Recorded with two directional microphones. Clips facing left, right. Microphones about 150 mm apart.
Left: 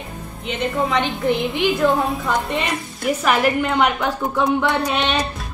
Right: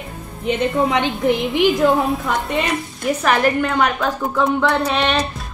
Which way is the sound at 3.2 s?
10° left (ahead or behind).